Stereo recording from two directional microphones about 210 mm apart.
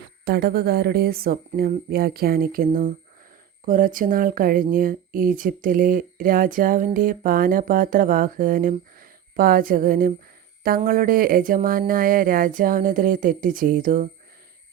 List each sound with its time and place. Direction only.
0.3 s speech: 50° right (ahead or behind)